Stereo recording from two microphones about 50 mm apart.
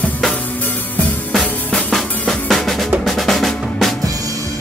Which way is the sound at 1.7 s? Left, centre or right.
Centre.